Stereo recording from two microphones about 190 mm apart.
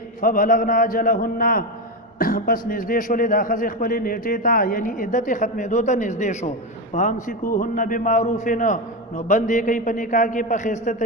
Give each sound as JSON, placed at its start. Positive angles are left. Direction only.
{"t": 0.2, "sound": "a man's voice", "side_deg": 45}